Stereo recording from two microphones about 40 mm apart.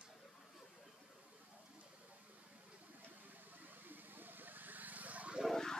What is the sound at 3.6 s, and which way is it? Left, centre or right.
Vehicle, right.